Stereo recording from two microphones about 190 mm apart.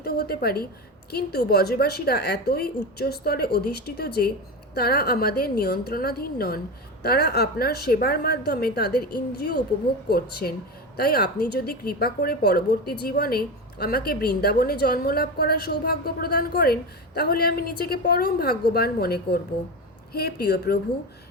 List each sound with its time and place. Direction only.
0.0 s a woman's voice: 55° left (ahead or behind)